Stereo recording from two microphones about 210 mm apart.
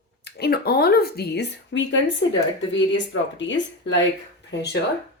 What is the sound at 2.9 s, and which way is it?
Speech, 60° left (ahead or behind).